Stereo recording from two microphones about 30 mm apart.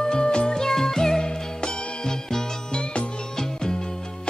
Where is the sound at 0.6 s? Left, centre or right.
Centre.